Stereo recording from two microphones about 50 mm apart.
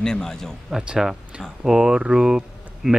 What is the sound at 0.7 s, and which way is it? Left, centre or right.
Speech, centre.